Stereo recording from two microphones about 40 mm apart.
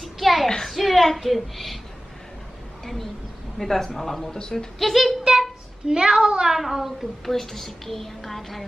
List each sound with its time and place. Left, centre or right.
0.0 s a sound: centre
2.8 s a sound: centre
3.5 s speech: centre
4.4 s speech: centre
4.7 s a woman's voice: centre
5.3 s a sound: centre
5.9 s a woman's voice: centre
6.5 s a woman's voice: centre
7.2 s a woman's voice: centre